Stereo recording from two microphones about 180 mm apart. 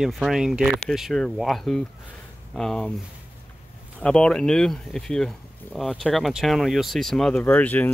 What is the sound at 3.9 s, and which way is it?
Speech, 5° left (ahead or behind).